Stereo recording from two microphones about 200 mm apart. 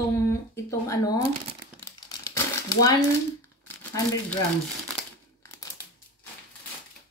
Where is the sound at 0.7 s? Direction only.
15° left (ahead or behind).